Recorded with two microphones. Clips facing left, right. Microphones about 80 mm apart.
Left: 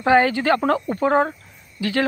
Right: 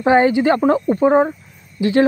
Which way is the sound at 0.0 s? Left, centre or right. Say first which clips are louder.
Right 3 dB; right.